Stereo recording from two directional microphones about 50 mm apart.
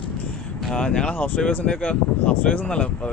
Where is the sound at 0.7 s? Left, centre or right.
Centre.